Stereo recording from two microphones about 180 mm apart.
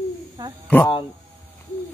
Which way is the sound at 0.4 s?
20° right (ahead or behind).